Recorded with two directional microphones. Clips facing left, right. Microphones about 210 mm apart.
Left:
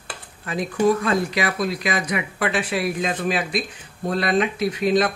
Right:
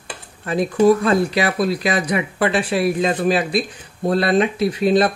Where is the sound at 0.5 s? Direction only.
30° right (ahead or behind).